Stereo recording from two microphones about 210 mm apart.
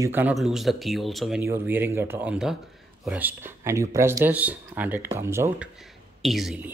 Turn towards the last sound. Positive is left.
turn(degrees=0)  # may be behind; listen again after turning